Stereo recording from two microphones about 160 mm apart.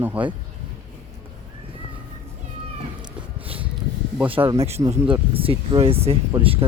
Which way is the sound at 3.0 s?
35° right (ahead or behind).